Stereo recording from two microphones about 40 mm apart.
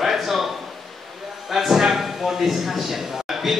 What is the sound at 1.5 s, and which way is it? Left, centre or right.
Speech, centre.